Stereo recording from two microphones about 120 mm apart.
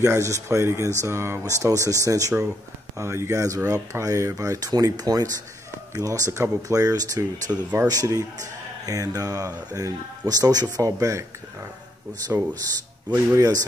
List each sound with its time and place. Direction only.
0.0 s speech: 25° right (ahead or behind)